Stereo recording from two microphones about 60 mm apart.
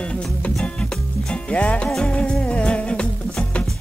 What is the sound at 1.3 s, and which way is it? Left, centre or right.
Music, centre.